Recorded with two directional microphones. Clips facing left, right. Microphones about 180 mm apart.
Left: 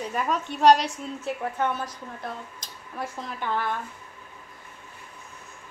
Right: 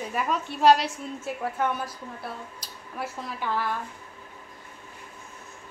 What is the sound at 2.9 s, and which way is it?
Speech, 5° right (ahead or behind).